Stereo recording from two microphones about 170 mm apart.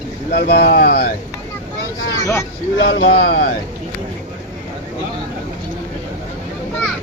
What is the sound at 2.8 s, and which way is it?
Speech, 90° left.